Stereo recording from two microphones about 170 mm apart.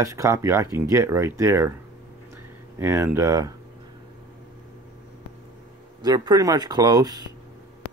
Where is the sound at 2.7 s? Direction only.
15° right (ahead or behind).